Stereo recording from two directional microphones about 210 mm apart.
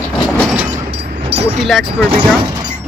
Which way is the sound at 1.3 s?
30° right (ahead or behind).